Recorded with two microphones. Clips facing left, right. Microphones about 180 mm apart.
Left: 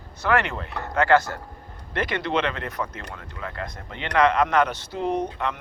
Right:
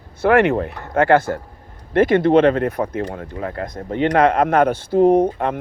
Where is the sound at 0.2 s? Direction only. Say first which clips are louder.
Right 9 dB; 55° right (ahead or behind).